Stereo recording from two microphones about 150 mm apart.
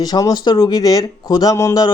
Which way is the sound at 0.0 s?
25° left (ahead or behind).